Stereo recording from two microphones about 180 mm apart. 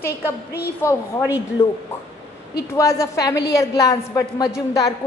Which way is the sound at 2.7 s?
15° left (ahead or behind).